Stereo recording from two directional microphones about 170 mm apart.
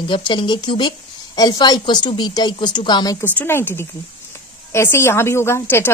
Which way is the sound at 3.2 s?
10° left (ahead or behind).